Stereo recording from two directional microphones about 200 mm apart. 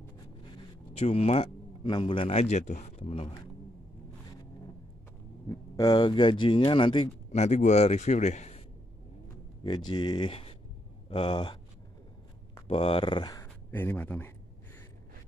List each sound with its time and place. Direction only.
0.9 s speech: 30° left (ahead or behind)
5.5 s speech: 20° left (ahead or behind)
9.6 s speech: 20° left (ahead or behind)
12.6 s speech: 25° left (ahead or behind); by 14.3 s 10° left (ahead or behind)